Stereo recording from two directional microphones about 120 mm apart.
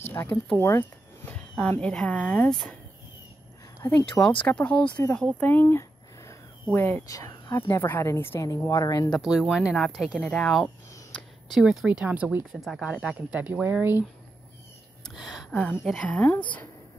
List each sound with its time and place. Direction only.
0.1 s speech: 15° left (ahead or behind)
3.8 s a woman's voice: 20° left (ahead or behind)
4.5 s speech: 10° left (ahead or behind)
7.1 s a woman's voice: 30° left (ahead or behind)
9.2 s speech: 5° right (ahead or behind)
11.1 s a sound: 10° left (ahead or behind)
11.6 s speech: 5° right (ahead or behind)
12.5 s speech: centre (ahead or behind); by 14.0 s 15° right (ahead or behind)
15.0 s a sound: centre (ahead or behind)
15.5 s speech: 10° left (ahead or behind)